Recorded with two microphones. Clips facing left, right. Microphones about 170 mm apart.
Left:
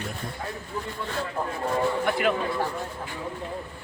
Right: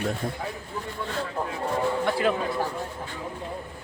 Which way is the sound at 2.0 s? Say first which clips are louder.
Right 2 dB; 25° right (ahead or behind).